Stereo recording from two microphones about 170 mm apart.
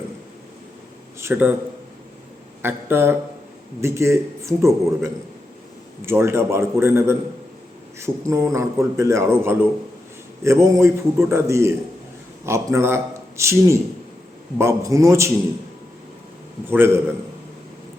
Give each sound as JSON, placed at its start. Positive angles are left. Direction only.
{"t": 1.2, "sound": "a man's voice", "side_deg": -10}
{"t": 2.6, "sound": "a man's voice", "side_deg": -15}
{"t": 16.6, "sound": "a man's voice", "side_deg": -15}